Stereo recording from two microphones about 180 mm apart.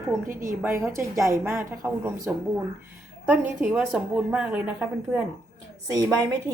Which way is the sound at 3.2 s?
10° right (ahead or behind).